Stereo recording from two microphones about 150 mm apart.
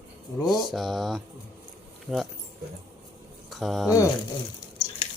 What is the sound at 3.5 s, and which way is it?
Speech, centre (ahead or behind).